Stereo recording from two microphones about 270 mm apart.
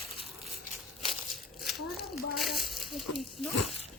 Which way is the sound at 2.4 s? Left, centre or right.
Centre.